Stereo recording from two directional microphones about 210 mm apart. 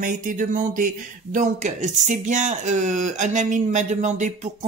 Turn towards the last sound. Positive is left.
turn(degrees=-35)  # may be behind; listen again after turning